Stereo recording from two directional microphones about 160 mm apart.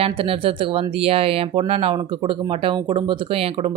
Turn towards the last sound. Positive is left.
turn(degrees=-35)  # may be behind; listen again after turning